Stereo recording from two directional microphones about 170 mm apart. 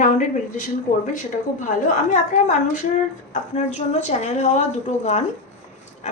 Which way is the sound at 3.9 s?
45° left (ahead or behind).